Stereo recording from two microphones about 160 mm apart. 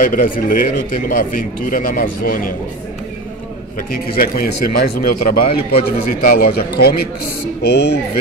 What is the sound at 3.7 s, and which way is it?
A man's voice, 65° left (ahead or behind).